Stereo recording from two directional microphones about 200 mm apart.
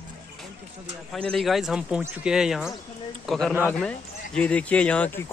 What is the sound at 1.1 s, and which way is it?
A man's voice, centre (ahead or behind).